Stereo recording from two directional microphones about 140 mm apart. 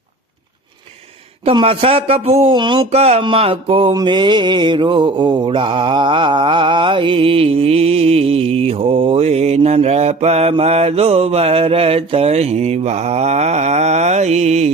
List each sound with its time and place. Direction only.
1.5 s mantra: 40° right (ahead or behind)
2.6 s speech: 35° right (ahead or behind)
2.9 s mantra: 45° right (ahead or behind)